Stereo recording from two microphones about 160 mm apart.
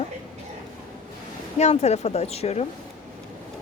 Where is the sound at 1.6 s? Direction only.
45° left (ahead or behind).